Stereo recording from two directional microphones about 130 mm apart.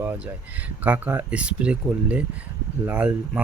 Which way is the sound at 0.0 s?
15° right (ahead or behind).